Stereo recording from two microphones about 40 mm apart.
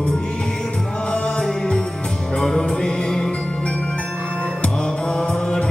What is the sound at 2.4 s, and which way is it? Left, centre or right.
Music, centre.